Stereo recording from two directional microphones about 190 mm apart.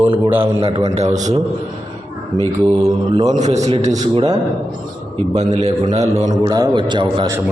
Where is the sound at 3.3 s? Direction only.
35° right (ahead or behind).